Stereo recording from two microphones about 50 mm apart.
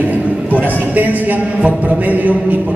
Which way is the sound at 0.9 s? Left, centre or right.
Right.